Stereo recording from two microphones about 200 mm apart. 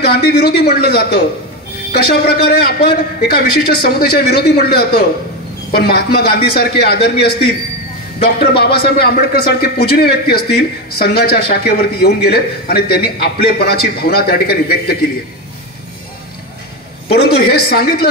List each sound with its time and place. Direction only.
0.0 s speech: 50° left (ahead or behind)
8.5 s speech: 50° left (ahead or behind)
17.1 s speech: 50° left (ahead or behind)